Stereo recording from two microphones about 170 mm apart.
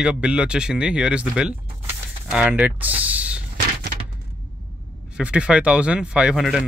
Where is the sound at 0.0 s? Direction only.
5° right (ahead or behind).